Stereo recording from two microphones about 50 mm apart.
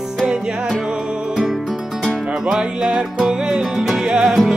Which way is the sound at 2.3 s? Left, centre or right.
Centre.